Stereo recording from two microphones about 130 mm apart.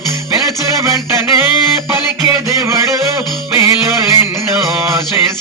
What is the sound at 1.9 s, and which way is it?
Music, 20° right (ahead or behind).